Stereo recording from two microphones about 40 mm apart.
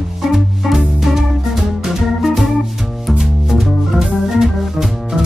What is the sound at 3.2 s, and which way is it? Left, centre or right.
Organ, centre.